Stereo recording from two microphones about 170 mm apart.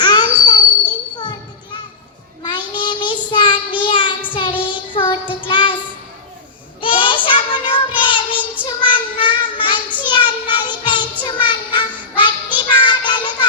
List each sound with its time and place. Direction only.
0.0 s children playing: 25° left (ahead or behind)
2.4 s child singing: 25° left (ahead or behind)
6.8 s child singing: 30° left (ahead or behind)